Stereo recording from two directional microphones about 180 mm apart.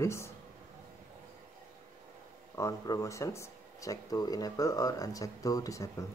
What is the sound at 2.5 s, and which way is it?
Speech, 15° left (ahead or behind).